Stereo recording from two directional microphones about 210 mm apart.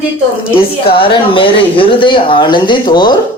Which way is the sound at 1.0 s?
25° left (ahead or behind).